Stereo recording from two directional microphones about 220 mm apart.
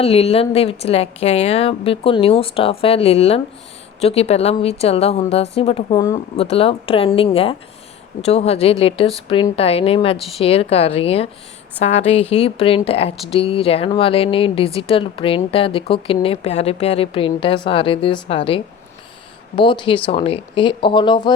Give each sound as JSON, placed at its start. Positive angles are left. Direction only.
{"t": 0.0, "sound": "a woman's voice", "side_deg": 25}